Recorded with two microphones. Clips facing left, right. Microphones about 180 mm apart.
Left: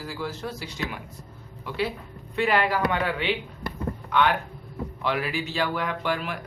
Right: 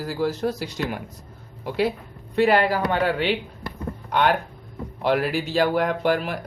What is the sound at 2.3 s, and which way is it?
Speech, 35° right (ahead or behind).